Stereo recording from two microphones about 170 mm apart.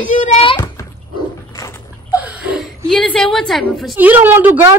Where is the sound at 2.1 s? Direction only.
10° right (ahead or behind).